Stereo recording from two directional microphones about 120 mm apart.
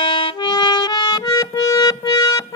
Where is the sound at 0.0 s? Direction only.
45° left (ahead or behind).